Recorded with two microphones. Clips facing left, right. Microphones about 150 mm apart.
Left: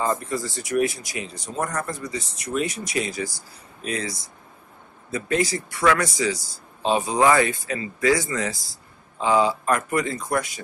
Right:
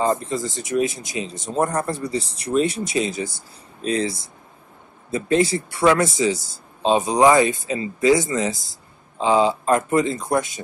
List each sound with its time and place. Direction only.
0.0 s speech: 20° right (ahead or behind)